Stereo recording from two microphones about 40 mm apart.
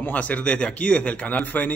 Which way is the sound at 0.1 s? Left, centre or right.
Left.